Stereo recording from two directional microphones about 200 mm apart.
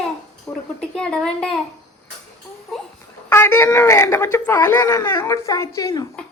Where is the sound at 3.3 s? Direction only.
10° left (ahead or behind).